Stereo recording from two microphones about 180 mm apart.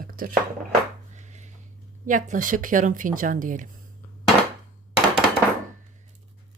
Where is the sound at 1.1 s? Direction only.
40° right (ahead or behind).